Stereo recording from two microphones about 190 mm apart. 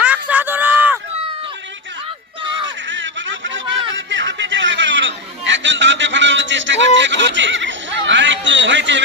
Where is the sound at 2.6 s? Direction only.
75° right (ahead or behind).